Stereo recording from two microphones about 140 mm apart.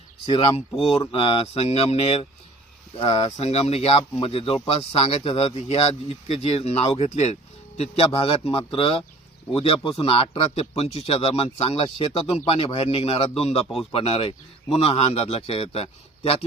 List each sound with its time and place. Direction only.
0.3 s a man's voice: 40° left (ahead or behind)
5.6 s a man's voice: 50° left (ahead or behind)